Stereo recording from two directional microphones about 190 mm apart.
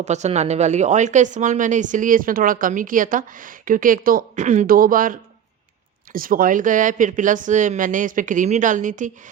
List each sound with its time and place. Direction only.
0.0 s speech: 35° right (ahead or behind)